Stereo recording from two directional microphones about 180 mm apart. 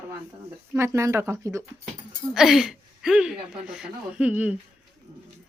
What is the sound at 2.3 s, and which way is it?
Speech, 5° right (ahead or behind).